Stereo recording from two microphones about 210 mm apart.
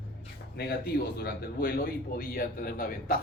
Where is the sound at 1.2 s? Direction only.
45° left (ahead or behind).